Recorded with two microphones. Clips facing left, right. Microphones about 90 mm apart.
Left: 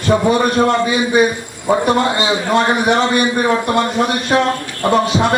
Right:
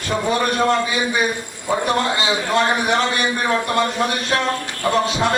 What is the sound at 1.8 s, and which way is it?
A man's voice, 15° left (ahead or behind).